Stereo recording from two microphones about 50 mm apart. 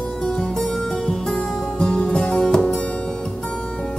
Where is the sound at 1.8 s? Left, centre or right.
Centre.